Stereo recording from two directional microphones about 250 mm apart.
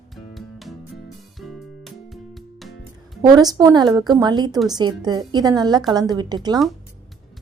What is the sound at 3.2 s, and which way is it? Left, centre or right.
A woman's voice, centre.